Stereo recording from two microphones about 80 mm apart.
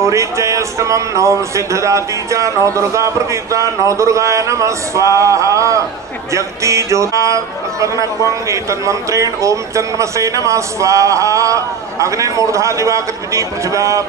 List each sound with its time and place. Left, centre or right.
0.0 s speech: right